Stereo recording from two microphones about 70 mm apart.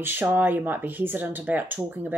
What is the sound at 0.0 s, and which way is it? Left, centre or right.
Speech, right.